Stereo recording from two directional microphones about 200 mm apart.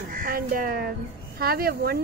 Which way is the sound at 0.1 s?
45° right (ahead or behind).